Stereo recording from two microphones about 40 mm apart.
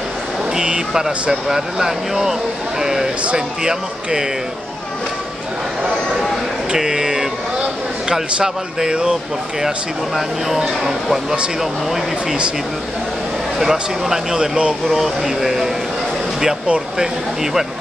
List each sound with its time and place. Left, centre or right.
0.6 s speech: centre
6.7 s speech: centre
10.1 s speech: centre
13.6 s speech: centre
16.6 s speech: right